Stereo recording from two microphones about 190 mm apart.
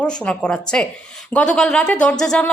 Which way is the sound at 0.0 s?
5° left (ahead or behind).